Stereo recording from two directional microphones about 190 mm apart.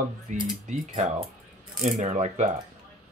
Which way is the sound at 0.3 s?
40° right (ahead or behind).